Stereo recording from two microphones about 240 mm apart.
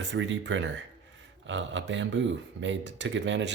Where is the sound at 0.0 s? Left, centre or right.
Right.